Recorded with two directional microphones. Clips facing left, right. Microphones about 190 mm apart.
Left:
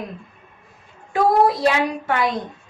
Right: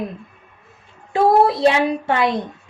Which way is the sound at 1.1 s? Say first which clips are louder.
Right 2 dB; 25° right (ahead or behind).